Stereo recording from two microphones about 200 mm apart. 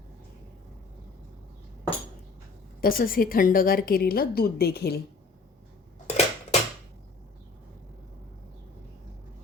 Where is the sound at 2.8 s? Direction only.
45° left (ahead or behind).